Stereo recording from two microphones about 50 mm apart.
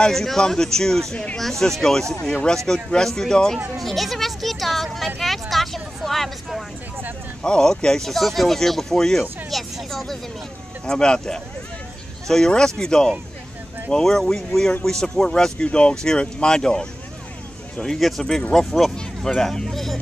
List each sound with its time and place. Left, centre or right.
0.0 s speech: centre
1.1 s speech: left
1.4 s speech: centre
3.8 s speech: centre
7.4 s speech: centre
9.5 s music: centre
10.9 s speech: centre
17.8 s speech: centre